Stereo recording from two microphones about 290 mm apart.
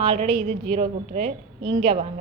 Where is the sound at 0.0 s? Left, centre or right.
Centre.